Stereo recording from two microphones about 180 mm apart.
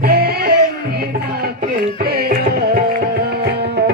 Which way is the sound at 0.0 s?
60° right (ahead or behind).